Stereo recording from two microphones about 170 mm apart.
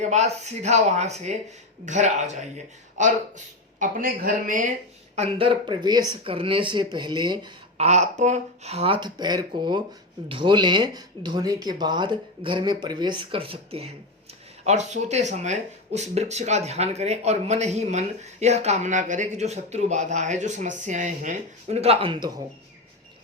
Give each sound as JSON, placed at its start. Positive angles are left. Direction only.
{"t": 0.0, "sound": "speech", "side_deg": -40}
{"t": 5.1, "sound": "speech", "side_deg": -35}
{"t": 7.8, "sound": "speech", "side_deg": -40}